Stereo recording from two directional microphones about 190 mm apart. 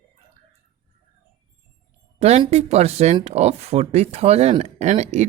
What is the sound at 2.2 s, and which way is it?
Speech, 35° right (ahead or behind).